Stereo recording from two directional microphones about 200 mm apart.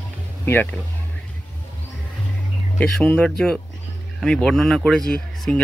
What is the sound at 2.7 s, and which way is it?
Speech, 5° left (ahead or behind).